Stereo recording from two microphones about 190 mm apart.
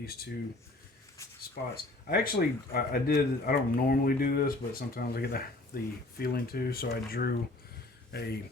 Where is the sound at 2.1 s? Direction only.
55° left (ahead or behind).